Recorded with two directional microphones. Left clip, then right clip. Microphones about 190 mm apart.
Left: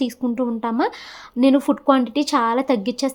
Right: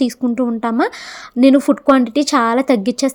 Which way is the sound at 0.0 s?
25° right (ahead or behind).